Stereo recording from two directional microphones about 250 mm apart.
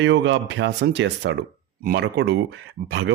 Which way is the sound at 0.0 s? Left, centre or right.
Right.